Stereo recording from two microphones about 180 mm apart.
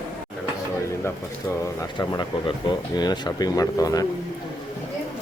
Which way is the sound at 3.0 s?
20° left (ahead or behind).